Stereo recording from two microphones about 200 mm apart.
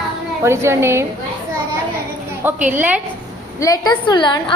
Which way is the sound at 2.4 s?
10° right (ahead or behind).